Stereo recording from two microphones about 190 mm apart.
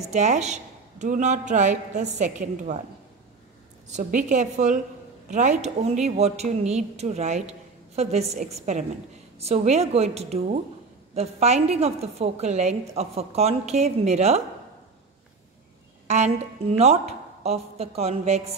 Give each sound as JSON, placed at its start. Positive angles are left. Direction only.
{"t": 0.1, "sound": "a woman's voice", "side_deg": -40}
{"t": 3.9, "sound": "a woman's voice", "side_deg": -40}
{"t": 16.1, "sound": "a woman's voice", "side_deg": -35}